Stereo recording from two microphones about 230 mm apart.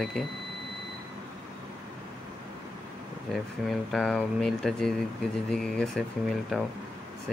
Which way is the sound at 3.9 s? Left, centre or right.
Centre.